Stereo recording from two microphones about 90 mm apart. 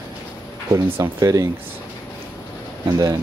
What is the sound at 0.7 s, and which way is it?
Speech, 35° right (ahead or behind).